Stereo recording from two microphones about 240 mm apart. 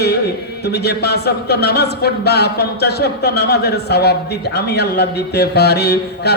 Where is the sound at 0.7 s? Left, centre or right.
Left.